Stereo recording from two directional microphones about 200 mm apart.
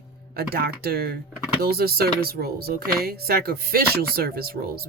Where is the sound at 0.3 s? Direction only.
50° right (ahead or behind).